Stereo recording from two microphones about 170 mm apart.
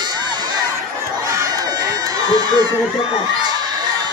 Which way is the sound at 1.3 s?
20° right (ahead or behind).